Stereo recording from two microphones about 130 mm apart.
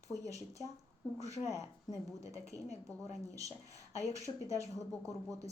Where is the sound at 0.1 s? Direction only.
25° right (ahead or behind).